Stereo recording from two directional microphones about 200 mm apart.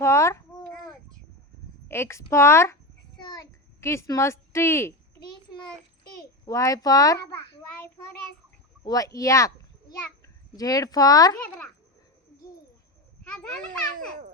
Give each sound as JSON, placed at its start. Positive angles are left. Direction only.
{"t": 0.0, "sound": "babbling", "side_deg": 15}
{"t": 1.9, "sound": "speech", "side_deg": 15}
{"t": 3.2, "sound": "a sound", "side_deg": 15}
{"t": 6.4, "sound": "speech", "side_deg": 15}
{"t": 8.8, "sound": "speech", "side_deg": 15}
{"t": 10.6, "sound": "speech", "side_deg": 20}
{"t": 11.3, "sound": "babbling", "side_deg": 10}